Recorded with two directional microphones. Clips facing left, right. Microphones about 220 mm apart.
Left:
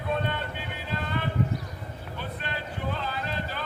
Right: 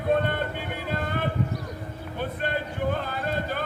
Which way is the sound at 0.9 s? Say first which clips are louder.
Right 2 dB; 50° right (ahead or behind).